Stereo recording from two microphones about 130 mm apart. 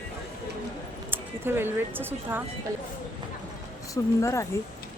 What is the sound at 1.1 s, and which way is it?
Speech, 15° right (ahead or behind).